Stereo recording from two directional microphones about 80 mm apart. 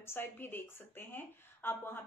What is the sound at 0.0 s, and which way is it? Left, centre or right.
A woman's voice, left.